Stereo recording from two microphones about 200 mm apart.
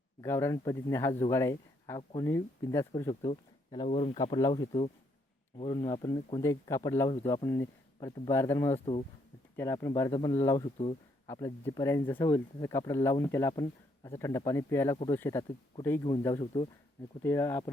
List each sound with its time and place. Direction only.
0.2 s speech: 15° left (ahead or behind); by 4.2 s 30° left (ahead or behind)
4.2 s speech: 20° left (ahead or behind)
8.8 s speech: 30° left (ahead or behind)
9.6 s speech: 15° left (ahead or behind)
17.2 s speech: 15° left (ahead or behind)